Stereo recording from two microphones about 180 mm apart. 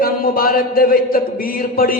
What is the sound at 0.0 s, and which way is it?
A man's voice, 55° left (ahead or behind).